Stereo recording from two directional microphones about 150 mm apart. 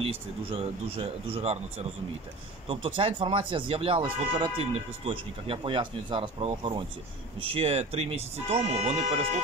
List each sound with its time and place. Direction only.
0.0 s speech: 40° right (ahead or behind)